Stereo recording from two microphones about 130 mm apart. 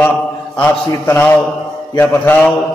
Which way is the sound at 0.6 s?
15° left (ahead or behind).